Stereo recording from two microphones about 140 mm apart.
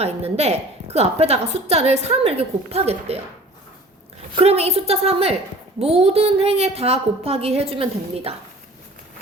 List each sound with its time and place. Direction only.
0.0 s a woman's voice: 45° right (ahead or behind)
4.4 s a woman's voice: 45° right (ahead or behind)